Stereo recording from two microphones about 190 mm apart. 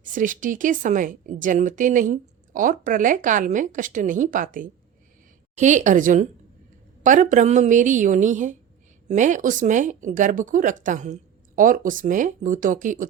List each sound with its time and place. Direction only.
0.0 s a woman's voice: 45° right (ahead or behind)